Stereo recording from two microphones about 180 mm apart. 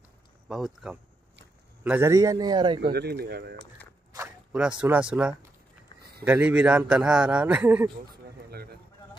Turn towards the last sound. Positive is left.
turn(degrees=-10)  # may be behind; listen again after turning